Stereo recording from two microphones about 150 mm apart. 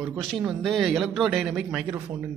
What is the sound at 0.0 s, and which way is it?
A man's voice, centre (ahead or behind).